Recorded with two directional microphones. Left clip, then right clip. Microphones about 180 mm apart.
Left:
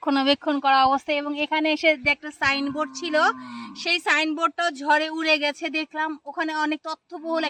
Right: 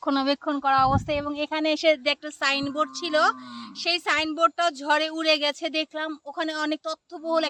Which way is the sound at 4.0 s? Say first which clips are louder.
Even; 10° right (ahead or behind).